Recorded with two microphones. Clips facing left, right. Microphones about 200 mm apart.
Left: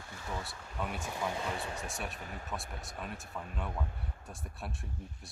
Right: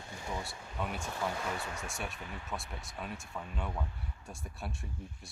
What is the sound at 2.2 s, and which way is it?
Speech, 40° left (ahead or behind).